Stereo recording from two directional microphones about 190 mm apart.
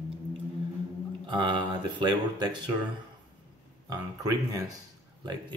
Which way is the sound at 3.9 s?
20° right (ahead or behind).